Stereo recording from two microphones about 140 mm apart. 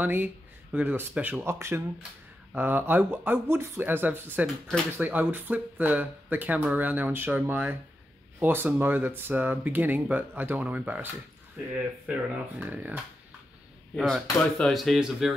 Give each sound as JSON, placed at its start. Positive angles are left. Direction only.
{"t": 0.0, "sound": "speech", "side_deg": -10}
{"t": 13.9, "sound": "speech", "side_deg": 0}